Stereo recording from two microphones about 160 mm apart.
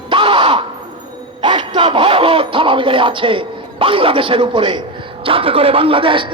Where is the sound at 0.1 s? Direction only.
30° right (ahead or behind).